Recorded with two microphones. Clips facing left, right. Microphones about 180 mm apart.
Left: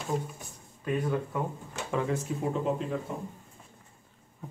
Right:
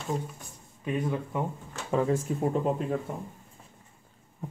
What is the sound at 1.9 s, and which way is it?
Speech, 35° right (ahead or behind).